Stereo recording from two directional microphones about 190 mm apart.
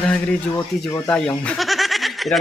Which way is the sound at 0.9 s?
15° left (ahead or behind).